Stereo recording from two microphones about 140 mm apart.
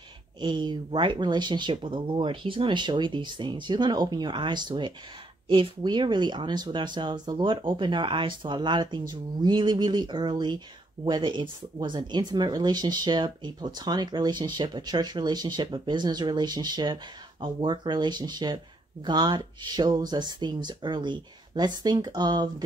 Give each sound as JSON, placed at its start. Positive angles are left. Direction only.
{"t": 0.4, "sound": "speech", "side_deg": -35}